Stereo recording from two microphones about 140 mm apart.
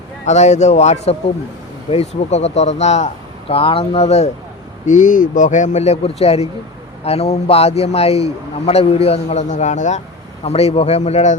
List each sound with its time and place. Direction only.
0.3 s a man's voice: 55° left (ahead or behind)
3.5 s a man's voice: 40° left (ahead or behind)
4.9 s a man's voice: 65° left (ahead or behind)
10.4 s a man's voice: 45° left (ahead or behind)